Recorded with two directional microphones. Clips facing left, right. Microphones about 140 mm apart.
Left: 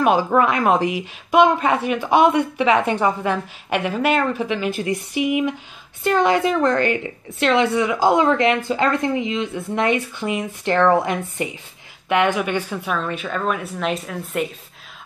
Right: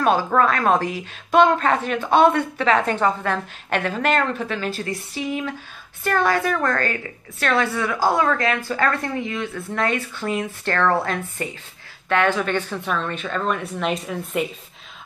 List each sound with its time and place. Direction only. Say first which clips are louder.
0.0 s a woman's voice: left 2 dB; 15° left (ahead or behind)